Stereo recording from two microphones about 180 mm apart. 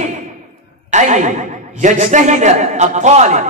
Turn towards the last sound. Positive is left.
turn(degrees=-40)  # may be behind; listen again after turning